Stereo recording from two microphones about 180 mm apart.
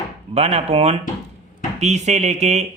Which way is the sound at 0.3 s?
35° right (ahead or behind).